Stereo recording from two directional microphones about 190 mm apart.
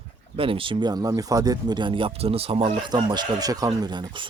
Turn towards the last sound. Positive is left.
turn(degrees=-25)  # may be behind; listen again after turning